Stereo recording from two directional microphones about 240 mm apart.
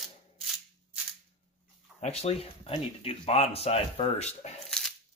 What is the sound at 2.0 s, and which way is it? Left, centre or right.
Speech, left.